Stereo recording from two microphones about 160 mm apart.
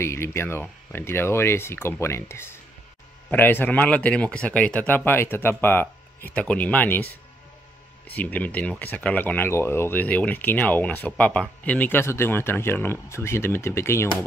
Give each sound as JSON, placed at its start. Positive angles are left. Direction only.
{"t": 0.0, "sound": "speech", "side_deg": 15}